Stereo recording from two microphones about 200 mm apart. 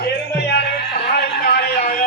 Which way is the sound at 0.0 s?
55° left (ahead or behind).